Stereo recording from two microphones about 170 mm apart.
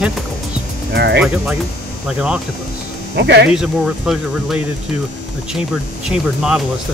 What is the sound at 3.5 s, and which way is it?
Speech, 5° right (ahead or behind).